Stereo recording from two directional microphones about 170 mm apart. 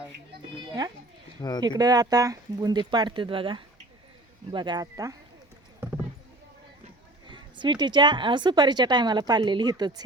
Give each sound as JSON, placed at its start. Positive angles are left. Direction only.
{"t": 1.4, "sound": "speech", "side_deg": 25}
{"t": 1.6, "sound": "a woman's voice", "side_deg": -20}
{"t": 7.3, "sound": "a woman's voice", "side_deg": -25}